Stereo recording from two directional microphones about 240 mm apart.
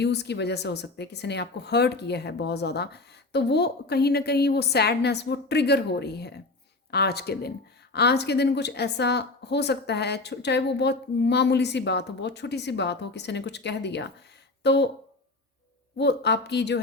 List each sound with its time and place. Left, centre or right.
0.0 s speech: left
16.0 s speech: left